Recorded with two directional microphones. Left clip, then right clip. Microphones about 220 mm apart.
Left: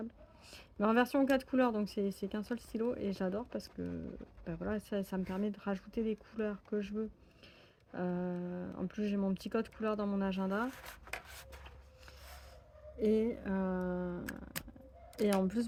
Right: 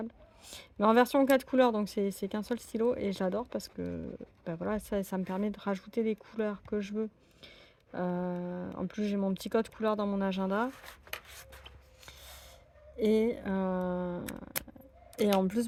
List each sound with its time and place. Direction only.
0.0 s speech: 35° right (ahead or behind)
13.0 s speech: 40° right (ahead or behind)